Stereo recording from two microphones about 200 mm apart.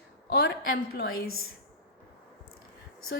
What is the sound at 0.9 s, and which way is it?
Speech, 50° left (ahead or behind).